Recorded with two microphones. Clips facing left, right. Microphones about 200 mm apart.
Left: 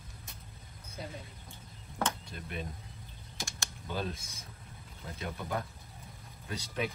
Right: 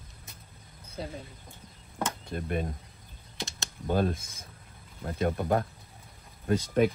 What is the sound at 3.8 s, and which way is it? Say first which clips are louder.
Speech: right 10 dB; 50° right (ahead or behind).